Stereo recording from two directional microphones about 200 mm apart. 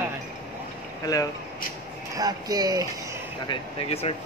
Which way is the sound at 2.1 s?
20° right (ahead or behind).